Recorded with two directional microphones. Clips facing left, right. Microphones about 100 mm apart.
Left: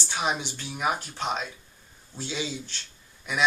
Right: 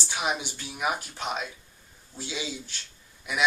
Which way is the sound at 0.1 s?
5° right (ahead or behind).